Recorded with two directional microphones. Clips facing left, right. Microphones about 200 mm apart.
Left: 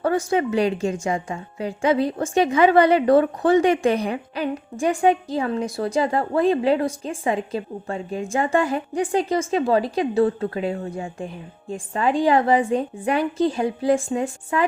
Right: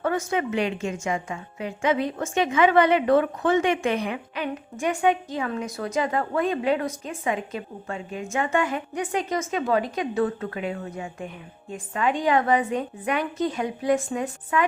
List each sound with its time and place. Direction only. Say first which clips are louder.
0.0 s a woman's voice: left 4 dB; 35° left (ahead or behind)